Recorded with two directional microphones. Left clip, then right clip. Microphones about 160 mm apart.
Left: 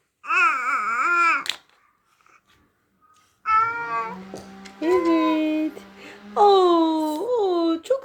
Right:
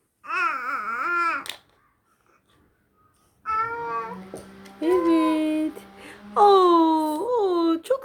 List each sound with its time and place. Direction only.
0.2 s babbling: centre (ahead or behind)
3.4 s music: 5° right (ahead or behind)
4.3 s music: 20° right (ahead or behind)
4.8 s music: centre (ahead or behind)
7.2 s a sound: 5° right (ahead or behind)